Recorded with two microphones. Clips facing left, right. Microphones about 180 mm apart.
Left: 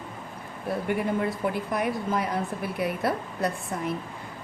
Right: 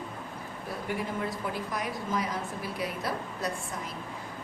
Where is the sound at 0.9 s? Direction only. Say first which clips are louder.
Left 5 dB; 60° left (ahead or behind).